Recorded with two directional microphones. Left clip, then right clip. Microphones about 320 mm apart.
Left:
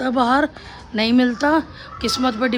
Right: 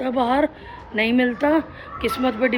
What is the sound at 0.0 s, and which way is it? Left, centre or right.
Speech, centre.